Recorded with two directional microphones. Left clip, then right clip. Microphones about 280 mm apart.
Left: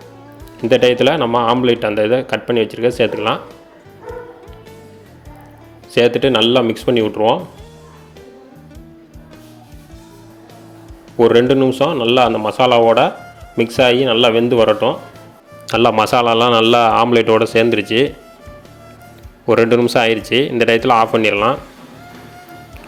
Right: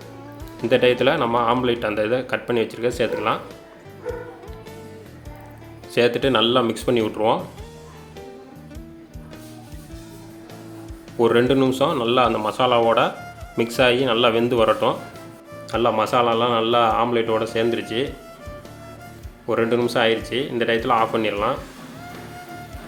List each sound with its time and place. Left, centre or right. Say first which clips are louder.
0.7 s a man's voice: left 5 dB; centre
4.1 s music: even; centre
5.9 s a man's voice: left 6 dB; centre
11.2 s a man's voice: left 6 dB; centre
15.6 s speech: left 7 dB; left
19.5 s speech: left 8 dB; left